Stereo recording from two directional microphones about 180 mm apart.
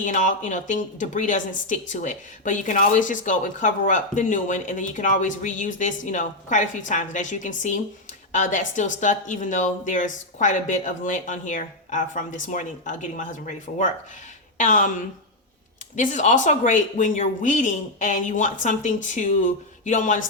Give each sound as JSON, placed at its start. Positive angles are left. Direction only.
{"t": 0.0, "sound": "a woman's voice", "side_deg": 45}
{"t": 16.0, "sound": "a woman's voice", "side_deg": 45}